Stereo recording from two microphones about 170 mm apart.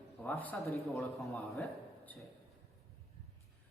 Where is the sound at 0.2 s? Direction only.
10° left (ahead or behind).